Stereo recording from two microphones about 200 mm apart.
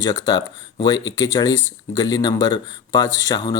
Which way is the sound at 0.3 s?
20° left (ahead or behind).